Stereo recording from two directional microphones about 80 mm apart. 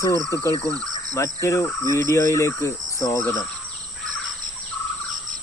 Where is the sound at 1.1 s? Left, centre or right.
Left.